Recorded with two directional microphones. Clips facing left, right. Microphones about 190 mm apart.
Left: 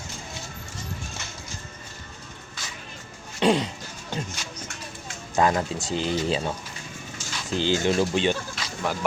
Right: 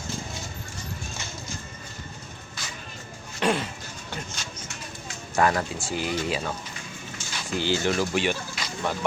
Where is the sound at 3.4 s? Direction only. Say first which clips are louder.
Left 4 dB; 20° left (ahead or behind).